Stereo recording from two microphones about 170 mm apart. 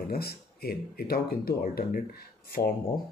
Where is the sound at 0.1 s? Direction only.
65° left (ahead or behind).